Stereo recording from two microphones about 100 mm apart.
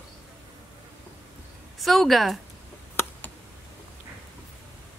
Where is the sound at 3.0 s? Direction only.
25° left (ahead or behind).